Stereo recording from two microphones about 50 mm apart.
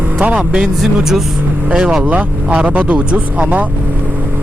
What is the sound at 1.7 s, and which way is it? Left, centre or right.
Speech, centre.